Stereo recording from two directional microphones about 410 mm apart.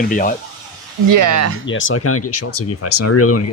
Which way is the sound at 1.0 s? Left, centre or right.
Right.